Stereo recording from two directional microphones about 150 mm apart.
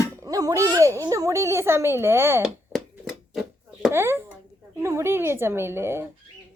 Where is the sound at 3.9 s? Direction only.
15° right (ahead or behind).